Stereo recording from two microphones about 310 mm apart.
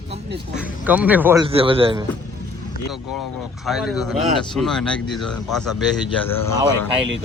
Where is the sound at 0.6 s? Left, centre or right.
Centre.